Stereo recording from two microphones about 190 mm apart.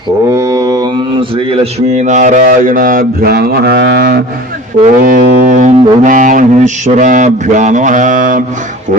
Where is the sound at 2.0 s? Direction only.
40° right (ahead or behind); by 4.2 s 60° right (ahead or behind).